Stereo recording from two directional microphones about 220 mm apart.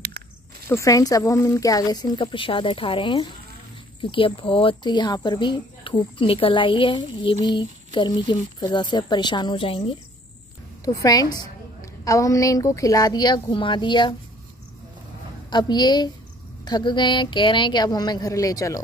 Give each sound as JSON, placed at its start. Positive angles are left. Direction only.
{"t": 0.7, "sound": "a woman's voice", "side_deg": 15}
{"t": 15.5, "sound": "speech", "side_deg": 20}